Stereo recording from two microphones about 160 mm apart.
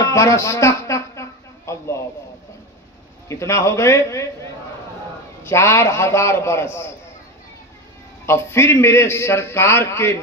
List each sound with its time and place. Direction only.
0.0 s a sound: 20° left (ahead or behind)
3.3 s a man's voice: 20° left (ahead or behind)
8.3 s a man's voice: 15° left (ahead or behind)